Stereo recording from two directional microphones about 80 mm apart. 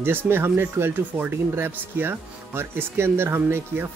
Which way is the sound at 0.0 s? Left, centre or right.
Right.